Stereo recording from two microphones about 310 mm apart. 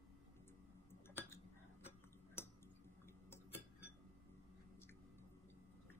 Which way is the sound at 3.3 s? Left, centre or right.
Centre.